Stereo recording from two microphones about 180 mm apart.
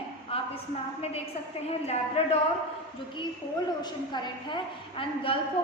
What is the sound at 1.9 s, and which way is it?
Speech, 35° left (ahead or behind).